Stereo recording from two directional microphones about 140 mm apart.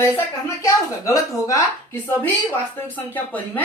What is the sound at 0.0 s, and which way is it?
Speech, 20° left (ahead or behind).